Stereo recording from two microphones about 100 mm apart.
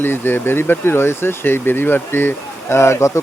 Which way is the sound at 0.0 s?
20° left (ahead or behind).